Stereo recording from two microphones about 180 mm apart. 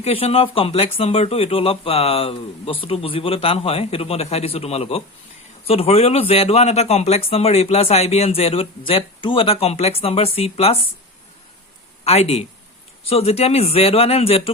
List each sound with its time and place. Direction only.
0.0 s speech: 35° left (ahead or behind)
12.0 s speech: 35° left (ahead or behind)